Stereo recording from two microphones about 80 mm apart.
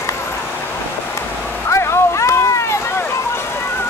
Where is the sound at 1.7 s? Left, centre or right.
Left.